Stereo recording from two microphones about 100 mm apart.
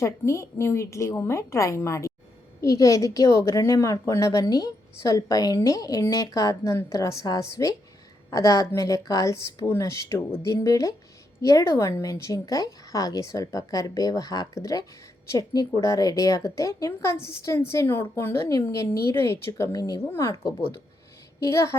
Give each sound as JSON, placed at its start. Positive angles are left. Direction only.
{"t": 0.0, "sound": "a woman's voice", "side_deg": 30}
{"t": 21.4, "sound": "a woman's voice", "side_deg": 30}